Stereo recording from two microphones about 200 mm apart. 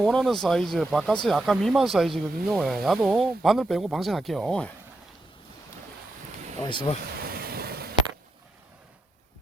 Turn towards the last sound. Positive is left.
turn(degrees=-50)  # may be behind; listen again after turning